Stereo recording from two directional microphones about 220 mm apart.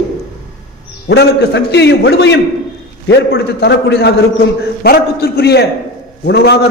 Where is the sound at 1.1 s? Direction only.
50° left (ahead or behind).